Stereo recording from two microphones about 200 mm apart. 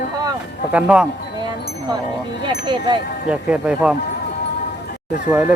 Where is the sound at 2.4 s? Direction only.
20° right (ahead or behind).